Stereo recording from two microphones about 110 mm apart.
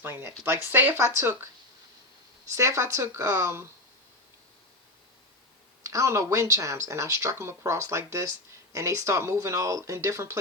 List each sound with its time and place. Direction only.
0.0 s speech: 20° right (ahead or behind)
2.5 s speech: 25° right (ahead or behind)
5.8 s speech: 30° right (ahead or behind)